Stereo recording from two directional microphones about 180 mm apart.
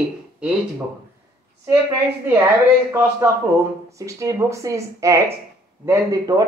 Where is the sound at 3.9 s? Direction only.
15° right (ahead or behind).